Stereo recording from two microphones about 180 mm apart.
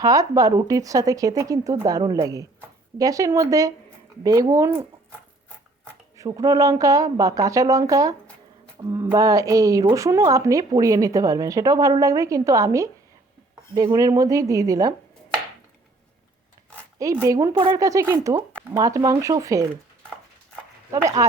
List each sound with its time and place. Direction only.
0.0 s a woman's voice: 20° right (ahead or behind)
6.1 s a woman's voice: 20° right (ahead or behind)
17.0 s speech: 20° right (ahead or behind)
20.9 s speech: 20° right (ahead or behind)